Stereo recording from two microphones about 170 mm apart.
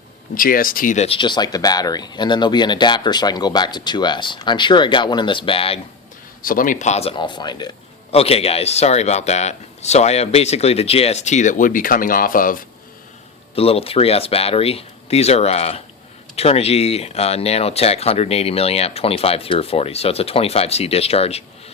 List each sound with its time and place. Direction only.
0.3 s speech: 55° left (ahead or behind)
1.0 s speech: 30° left (ahead or behind)
6.4 s speech: 55° left (ahead or behind); by 7.7 s 25° left (ahead or behind)
8.1 s speech: 35° left (ahead or behind); by 12.6 s 55° left (ahead or behind)
13.6 s speech: 35° left (ahead or behind)